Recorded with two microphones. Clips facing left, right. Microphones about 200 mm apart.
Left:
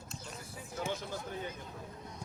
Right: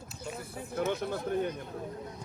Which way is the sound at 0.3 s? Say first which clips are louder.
Right 10 dB; 60° right (ahead or behind).